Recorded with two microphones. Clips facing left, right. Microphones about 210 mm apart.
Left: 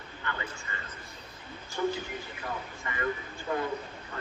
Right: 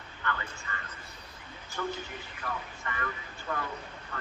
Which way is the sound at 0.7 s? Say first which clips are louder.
Left 1 dB; 20° left (ahead or behind).